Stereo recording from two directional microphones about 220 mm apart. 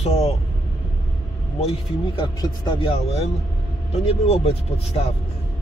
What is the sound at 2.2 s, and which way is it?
Speech, 20° left (ahead or behind).